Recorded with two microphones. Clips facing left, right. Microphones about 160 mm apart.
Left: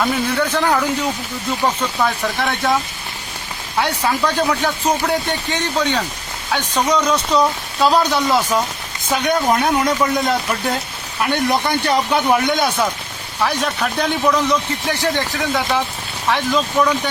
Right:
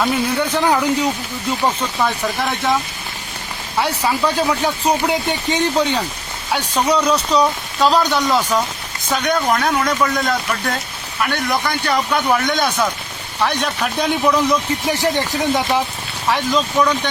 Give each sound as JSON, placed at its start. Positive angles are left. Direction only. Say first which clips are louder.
{"t": 0.0, "sound": "speech", "louder": "even", "side_deg": -10}
{"t": 3.8, "sound": "speech", "louder": "even", "side_deg": 0}
{"t": 7.3, "sound": "speech", "louder": "even", "side_deg": 5}
{"t": 13.4, "sound": "speech", "louder": "even", "side_deg": 5}
{"t": 16.2, "sound": "speech", "louder": "even", "side_deg": 0}